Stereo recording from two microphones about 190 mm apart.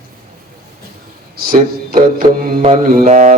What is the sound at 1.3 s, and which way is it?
Mantra, 45° right (ahead or behind).